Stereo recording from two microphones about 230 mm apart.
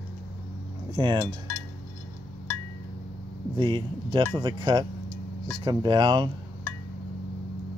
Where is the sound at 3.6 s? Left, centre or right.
Right.